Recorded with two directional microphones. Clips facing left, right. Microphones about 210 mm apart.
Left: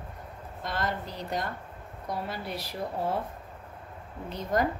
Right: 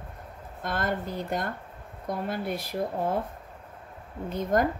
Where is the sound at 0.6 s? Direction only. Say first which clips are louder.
Right 3 dB; 55° right (ahead or behind).